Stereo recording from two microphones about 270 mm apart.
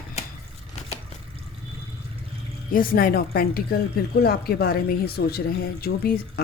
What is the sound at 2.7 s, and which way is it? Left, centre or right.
A woman's voice, left.